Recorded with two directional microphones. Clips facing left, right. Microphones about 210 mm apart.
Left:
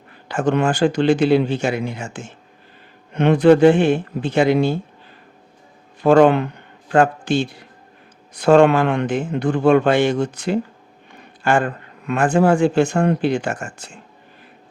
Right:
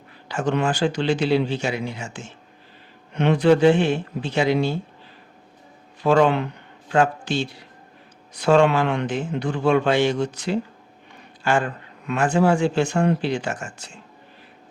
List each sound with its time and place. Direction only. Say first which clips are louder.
0.3 s speech: left 4 dB; 50° left (ahead or behind)
6.0 s speech: left 5 dB; 50° left (ahead or behind)